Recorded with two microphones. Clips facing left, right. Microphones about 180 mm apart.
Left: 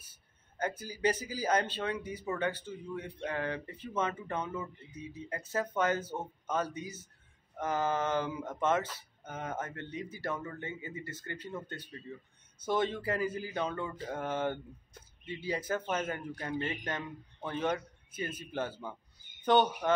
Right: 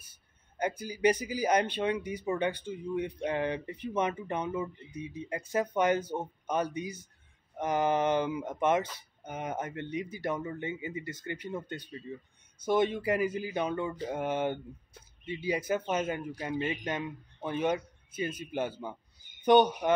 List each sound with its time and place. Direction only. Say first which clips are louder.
0.6 s speech: right 4 dB; 15° right (ahead or behind)